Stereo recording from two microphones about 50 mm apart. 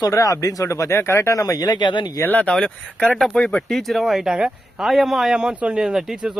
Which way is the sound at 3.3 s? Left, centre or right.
Centre.